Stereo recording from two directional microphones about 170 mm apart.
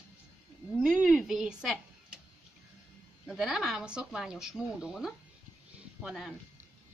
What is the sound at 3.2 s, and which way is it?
Speech, 5° right (ahead or behind).